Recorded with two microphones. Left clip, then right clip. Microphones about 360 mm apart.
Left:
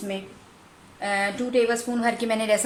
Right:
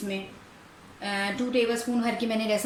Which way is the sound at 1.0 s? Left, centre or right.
Centre.